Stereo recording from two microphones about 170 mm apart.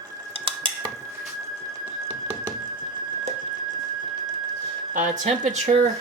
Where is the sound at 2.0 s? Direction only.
30° right (ahead or behind).